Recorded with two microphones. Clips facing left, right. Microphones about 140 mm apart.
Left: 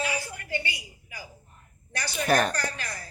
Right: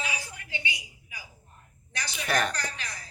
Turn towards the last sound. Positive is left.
turn(degrees=50)  # may be behind; listen again after turning